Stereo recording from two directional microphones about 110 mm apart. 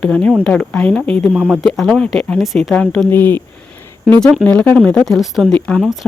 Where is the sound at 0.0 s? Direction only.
5° left (ahead or behind).